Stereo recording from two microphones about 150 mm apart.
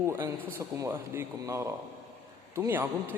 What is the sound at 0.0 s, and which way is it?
A man's voice, 15° right (ahead or behind).